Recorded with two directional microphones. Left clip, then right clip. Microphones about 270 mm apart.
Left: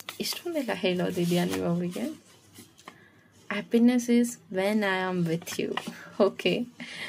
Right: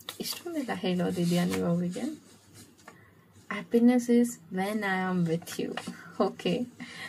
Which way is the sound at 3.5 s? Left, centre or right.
Left.